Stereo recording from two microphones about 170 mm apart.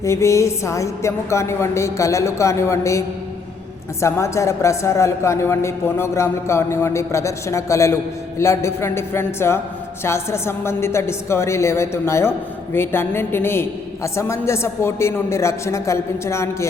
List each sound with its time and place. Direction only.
0.0 s a man's voice: 15° left (ahead or behind)
4.0 s a man's voice: 15° left (ahead or behind)